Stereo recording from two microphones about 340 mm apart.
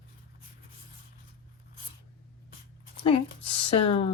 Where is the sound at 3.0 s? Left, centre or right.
Centre.